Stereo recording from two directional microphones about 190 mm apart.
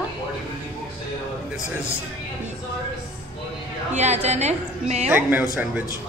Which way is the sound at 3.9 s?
35° right (ahead or behind).